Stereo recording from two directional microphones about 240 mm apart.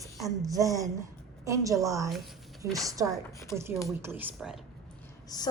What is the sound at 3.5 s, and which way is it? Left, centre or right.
Speech, centre.